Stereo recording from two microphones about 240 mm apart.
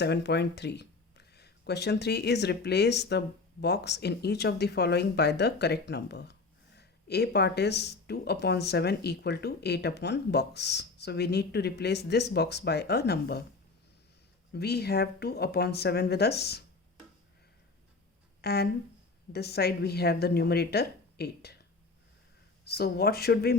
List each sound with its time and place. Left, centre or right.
0.0 s speech: left
14.5 s speech: left
18.4 s speech: left
22.6 s speech: left